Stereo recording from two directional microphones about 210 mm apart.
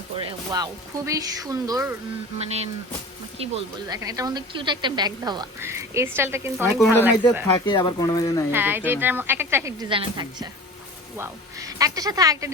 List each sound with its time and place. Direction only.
0.3 s a woman's voice: 20° right (ahead or behind)
3.3 s a woman's voice: 30° right (ahead or behind); by 7.4 s 10° right (ahead or behind)
7.6 s speech: 20° left (ahead or behind)
8.5 s a woman's voice: 10° right (ahead or behind)
9.9 s a woman's voice: 20° right (ahead or behind)